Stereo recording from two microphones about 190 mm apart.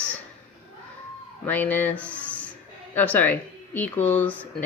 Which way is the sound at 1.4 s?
10° left (ahead or behind).